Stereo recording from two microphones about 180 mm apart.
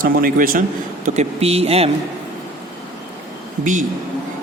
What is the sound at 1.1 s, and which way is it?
Speech, 35° right (ahead or behind).